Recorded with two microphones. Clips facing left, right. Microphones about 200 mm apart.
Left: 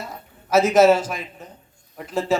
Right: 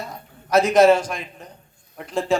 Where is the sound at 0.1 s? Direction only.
5° left (ahead or behind).